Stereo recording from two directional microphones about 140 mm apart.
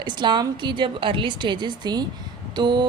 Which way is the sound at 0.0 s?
30° right (ahead or behind).